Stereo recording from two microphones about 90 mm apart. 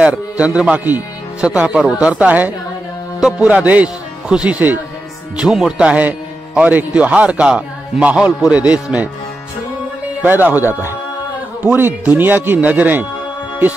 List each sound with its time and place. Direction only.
0.0 s a man's voice: 10° right (ahead or behind)
3.2 s speech: 5° right (ahead or behind)
3.4 s a man's voice: 15° right (ahead or behind)
5.4 s a man's voice: 5° right (ahead or behind)
10.2 s speech: 20° right (ahead or behind)